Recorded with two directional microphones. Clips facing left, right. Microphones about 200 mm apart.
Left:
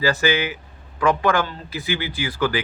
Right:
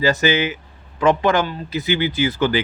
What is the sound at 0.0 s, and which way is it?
A man's voice, 20° right (ahead or behind).